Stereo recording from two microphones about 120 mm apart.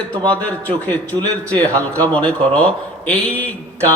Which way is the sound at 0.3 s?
10° left (ahead or behind).